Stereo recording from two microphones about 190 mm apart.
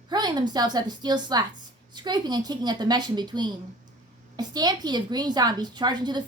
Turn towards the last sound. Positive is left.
turn(degrees=-20)  # may be behind; listen again after turning